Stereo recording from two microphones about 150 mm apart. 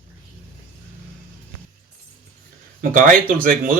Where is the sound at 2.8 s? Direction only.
65° right (ahead or behind).